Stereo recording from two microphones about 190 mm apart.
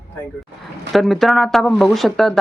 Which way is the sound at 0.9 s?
Centre (ahead or behind).